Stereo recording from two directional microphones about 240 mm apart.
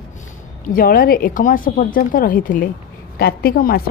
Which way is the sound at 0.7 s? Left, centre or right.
Left.